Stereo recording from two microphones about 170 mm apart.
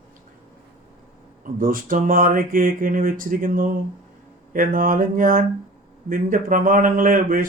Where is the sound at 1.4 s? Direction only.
55° right (ahead or behind).